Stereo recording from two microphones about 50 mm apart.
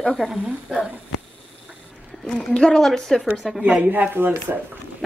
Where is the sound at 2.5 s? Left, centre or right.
Centre.